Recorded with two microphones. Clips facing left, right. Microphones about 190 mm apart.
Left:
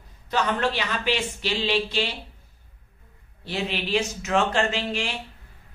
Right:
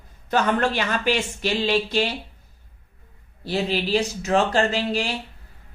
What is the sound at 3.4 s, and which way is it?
Speech, 35° right (ahead or behind).